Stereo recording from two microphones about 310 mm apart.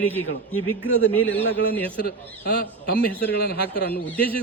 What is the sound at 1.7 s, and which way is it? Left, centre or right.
Speech, centre.